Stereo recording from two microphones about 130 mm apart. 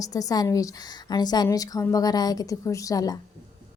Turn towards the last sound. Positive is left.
turn(degrees=30)  # may be behind; listen again after turning